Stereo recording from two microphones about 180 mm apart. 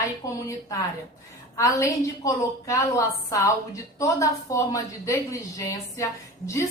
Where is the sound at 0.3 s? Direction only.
15° left (ahead or behind).